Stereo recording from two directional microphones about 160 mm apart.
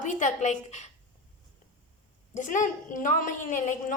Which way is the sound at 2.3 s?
50° left (ahead or behind).